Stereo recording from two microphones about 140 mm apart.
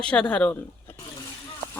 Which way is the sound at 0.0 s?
5° left (ahead or behind).